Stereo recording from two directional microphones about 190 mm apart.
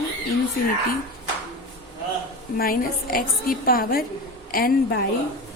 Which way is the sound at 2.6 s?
50° left (ahead or behind).